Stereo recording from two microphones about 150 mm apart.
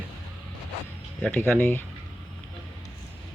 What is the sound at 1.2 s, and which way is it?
Speech, 10° left (ahead or behind).